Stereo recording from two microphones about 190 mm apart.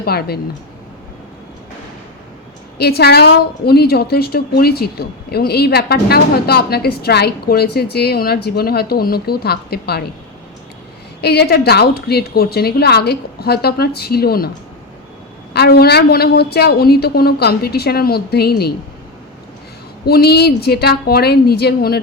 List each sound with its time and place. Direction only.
0.0 s a woman's voice: 55° left (ahead or behind)
2.7 s a woman's voice: 55° left (ahead or behind)
11.2 s a woman's voice: 60° left (ahead or behind)
15.5 s a woman's voice: 55° left (ahead or behind)
20.1 s a woman's voice: 55° left (ahead or behind)